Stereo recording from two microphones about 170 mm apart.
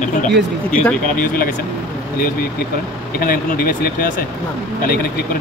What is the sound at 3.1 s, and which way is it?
Speech, 60° left (ahead or behind).